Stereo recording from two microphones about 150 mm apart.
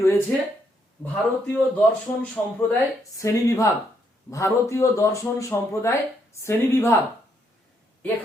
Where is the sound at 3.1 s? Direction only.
20° left (ahead or behind).